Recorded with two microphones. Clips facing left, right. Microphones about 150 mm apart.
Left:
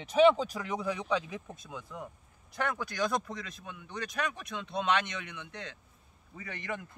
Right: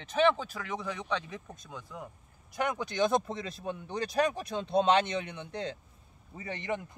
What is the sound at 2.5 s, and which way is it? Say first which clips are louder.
Speech: right 2 dB; 15° right (ahead or behind).